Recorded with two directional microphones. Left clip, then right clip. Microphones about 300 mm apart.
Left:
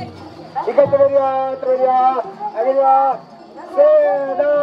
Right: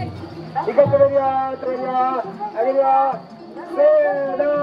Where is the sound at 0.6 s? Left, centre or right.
Left.